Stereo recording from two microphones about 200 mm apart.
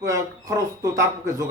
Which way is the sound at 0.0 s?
15° right (ahead or behind).